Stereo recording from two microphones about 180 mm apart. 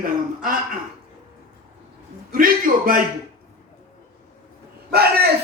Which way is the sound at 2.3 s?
50° right (ahead or behind).